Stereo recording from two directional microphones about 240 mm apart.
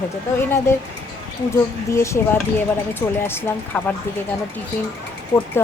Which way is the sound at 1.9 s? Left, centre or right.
Centre.